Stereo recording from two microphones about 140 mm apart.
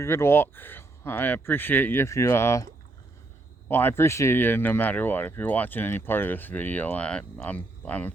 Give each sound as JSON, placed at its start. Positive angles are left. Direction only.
{"t": 0.0, "sound": "speech", "side_deg": 20}
{"t": 3.7, "sound": "speech", "side_deg": 15}